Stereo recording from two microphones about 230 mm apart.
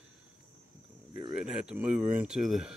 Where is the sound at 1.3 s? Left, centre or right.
Centre.